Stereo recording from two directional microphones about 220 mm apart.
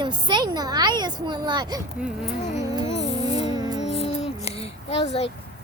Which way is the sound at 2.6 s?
15° right (ahead or behind).